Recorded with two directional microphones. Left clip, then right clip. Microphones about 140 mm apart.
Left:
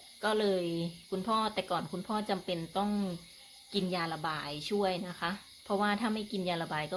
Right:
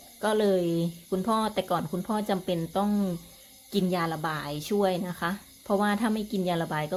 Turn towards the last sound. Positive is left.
turn(degrees=-10)  # may be behind; listen again after turning